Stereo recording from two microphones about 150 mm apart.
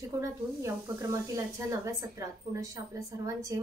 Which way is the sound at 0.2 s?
20° right (ahead or behind).